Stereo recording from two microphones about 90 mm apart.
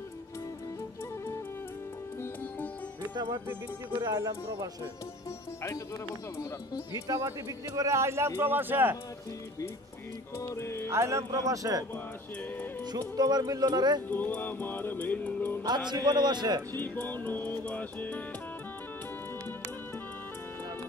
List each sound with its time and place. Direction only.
4.0 s speech: 40° right (ahead or behind)
7.2 s a man's voice: 35° right (ahead or behind)
10.4 s music: 30° left (ahead or behind)
10.9 s speech: 30° right (ahead or behind)
13.1 s a man's voice: 45° right (ahead or behind)
14.0 s music: 20° left (ahead or behind)
15.6 s a man's voice: 55° right (ahead or behind)
16.7 s music: 20° left (ahead or behind)